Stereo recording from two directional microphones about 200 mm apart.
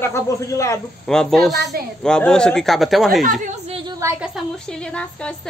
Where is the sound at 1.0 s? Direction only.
Centre (ahead or behind).